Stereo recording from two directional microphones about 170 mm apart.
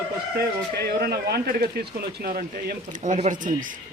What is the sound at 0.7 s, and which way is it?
Speech, 70° right (ahead or behind).